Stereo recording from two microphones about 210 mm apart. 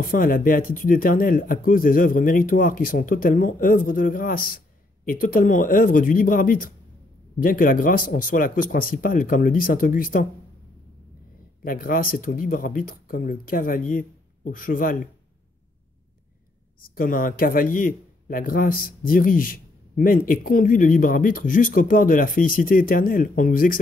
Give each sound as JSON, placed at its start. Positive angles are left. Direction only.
{"t": 0.0, "sound": "speech", "side_deg": 40}
{"t": 11.6, "sound": "speech", "side_deg": 40}
{"t": 16.8, "sound": "speech", "side_deg": 40}